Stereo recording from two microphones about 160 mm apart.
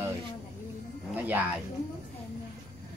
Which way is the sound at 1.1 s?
10° right (ahead or behind).